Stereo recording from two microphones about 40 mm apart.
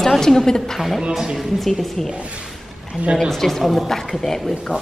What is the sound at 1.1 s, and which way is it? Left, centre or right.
Speech, centre.